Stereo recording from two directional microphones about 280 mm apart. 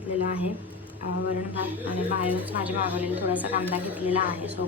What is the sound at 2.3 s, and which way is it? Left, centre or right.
A woman's voice, centre.